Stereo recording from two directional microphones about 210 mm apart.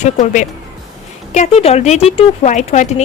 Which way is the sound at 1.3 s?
30° left (ahead or behind).